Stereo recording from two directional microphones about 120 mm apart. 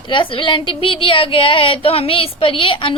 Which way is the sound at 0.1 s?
45° left (ahead or behind).